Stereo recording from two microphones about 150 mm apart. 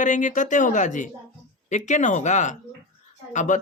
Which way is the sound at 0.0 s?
55° left (ahead or behind).